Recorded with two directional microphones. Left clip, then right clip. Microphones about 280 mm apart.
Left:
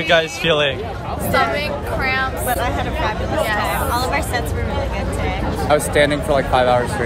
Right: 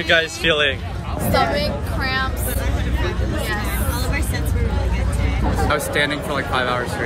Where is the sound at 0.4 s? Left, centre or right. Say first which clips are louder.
Left 1 dB; centre.